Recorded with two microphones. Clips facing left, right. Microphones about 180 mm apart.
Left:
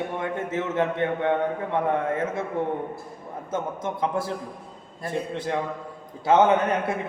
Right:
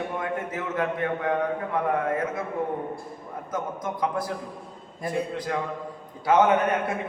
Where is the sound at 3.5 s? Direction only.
25° left (ahead or behind).